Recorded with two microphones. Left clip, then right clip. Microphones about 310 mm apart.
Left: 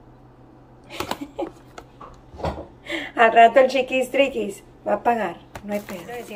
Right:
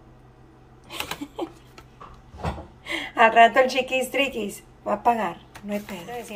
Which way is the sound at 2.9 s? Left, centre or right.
Centre.